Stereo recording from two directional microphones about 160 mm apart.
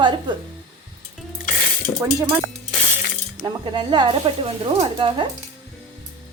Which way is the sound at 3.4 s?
30° right (ahead or behind).